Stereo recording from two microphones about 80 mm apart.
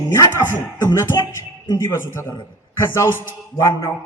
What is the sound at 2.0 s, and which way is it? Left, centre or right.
A man's voice, left.